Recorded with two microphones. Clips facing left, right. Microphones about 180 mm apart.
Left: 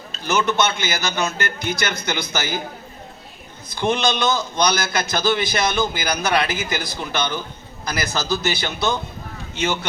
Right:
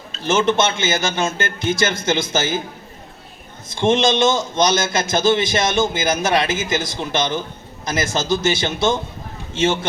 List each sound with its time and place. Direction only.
0.3 s a man's voice: 25° right (ahead or behind)
3.7 s a man's voice: 25° right (ahead or behind)